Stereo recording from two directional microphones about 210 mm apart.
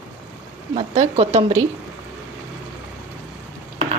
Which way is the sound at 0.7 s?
30° right (ahead or behind).